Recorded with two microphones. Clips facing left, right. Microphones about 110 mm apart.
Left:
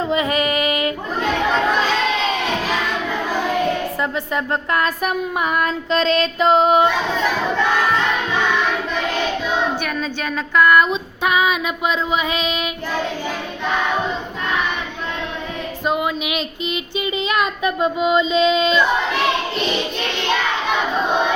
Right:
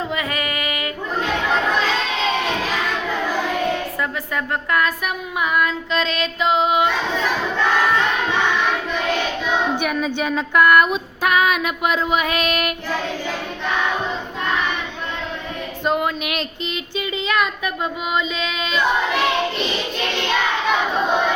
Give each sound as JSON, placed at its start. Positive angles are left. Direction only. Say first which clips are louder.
{"t": 0.1, "sound": "female singing", "louder": "left 6 dB", "side_deg": 25}
{"t": 4.7, "sound": "music", "louder": "left 1 dB", "side_deg": 30}
{"t": 9.8, "sound": "female singing", "louder": "right 3 dB", "side_deg": -15}
{"t": 15.9, "sound": "female singing", "louder": "even", "side_deg": 5}
{"t": 17.0, "sound": "child singing", "louder": "left 1 dB", "side_deg": 20}